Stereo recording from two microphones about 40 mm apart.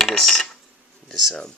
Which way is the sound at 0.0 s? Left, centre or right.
Centre.